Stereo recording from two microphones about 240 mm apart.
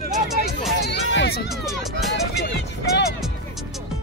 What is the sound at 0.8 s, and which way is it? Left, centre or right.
Music, left.